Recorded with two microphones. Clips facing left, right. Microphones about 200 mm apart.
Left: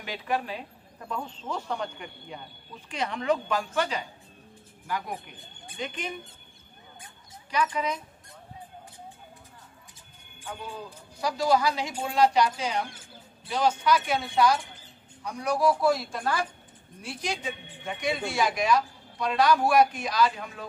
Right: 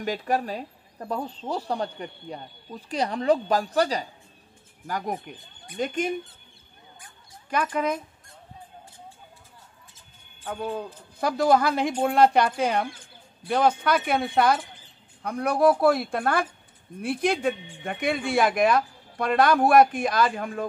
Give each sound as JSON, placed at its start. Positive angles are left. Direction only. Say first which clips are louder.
{"t": 0.0, "sound": "a woman's voice", "louder": "right 5 dB", "side_deg": -45}
{"t": 7.4, "sound": "a woman's voice", "louder": "right 3 dB", "side_deg": -50}
{"t": 10.5, "sound": "a woman's voice", "louder": "right 8 dB", "side_deg": -50}